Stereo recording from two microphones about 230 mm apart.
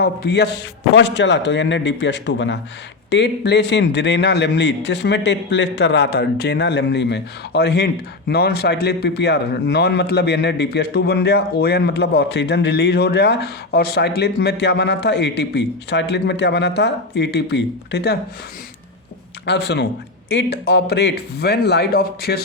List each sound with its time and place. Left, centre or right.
0.0 s a man's voice: left
19.5 s a man's voice: left